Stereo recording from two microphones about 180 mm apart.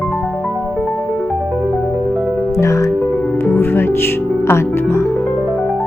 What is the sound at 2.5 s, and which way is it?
Speech, 15° left (ahead or behind).